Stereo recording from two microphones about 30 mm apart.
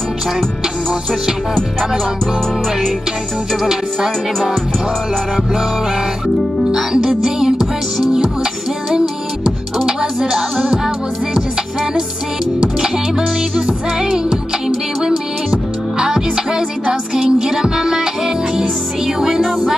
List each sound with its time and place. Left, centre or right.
6.7 s music: right
8.9 s music: right
10.3 s music: centre
14.0 s music: right
17.1 s music: right